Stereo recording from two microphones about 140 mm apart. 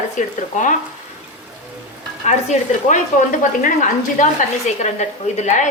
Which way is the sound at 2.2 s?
55° left (ahead or behind).